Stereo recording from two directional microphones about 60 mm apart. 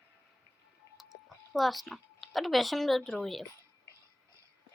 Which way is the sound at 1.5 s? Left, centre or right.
Centre.